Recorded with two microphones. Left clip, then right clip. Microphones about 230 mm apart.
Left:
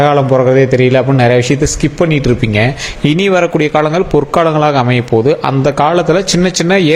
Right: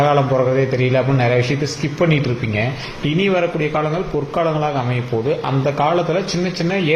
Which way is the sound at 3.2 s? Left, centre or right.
Left.